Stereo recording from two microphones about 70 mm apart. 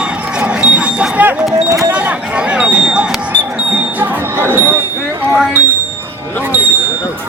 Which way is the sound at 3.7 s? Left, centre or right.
Right.